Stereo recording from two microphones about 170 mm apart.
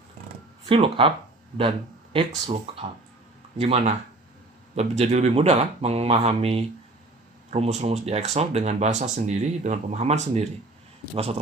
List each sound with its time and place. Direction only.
0.7 s speech: 30° right (ahead or behind)
2.1 s speech: 35° right (ahead or behind)